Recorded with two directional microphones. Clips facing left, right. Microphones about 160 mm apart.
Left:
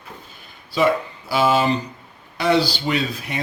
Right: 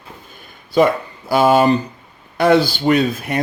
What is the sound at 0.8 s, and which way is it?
Speech, 50° right (ahead or behind).